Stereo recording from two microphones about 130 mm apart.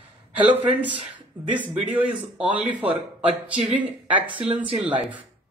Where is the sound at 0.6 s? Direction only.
15° right (ahead or behind).